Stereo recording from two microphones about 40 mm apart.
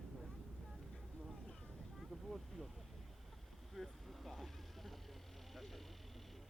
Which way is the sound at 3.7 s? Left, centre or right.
Centre.